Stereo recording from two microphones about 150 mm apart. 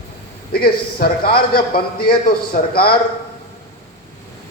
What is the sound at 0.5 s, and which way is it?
A man's voice, 90° left.